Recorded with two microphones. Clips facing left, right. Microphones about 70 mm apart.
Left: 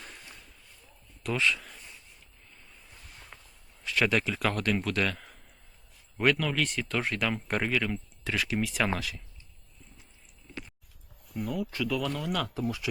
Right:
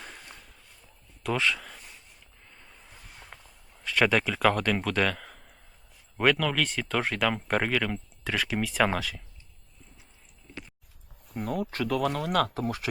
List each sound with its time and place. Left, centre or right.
1.3 s speech: right
4.0 s speech: right
6.4 s speech: right
7.5 s speech: right
11.3 s speech: right